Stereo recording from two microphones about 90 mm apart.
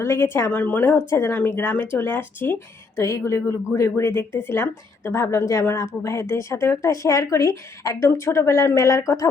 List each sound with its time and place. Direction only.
0.0 s speech: 30° left (ahead or behind)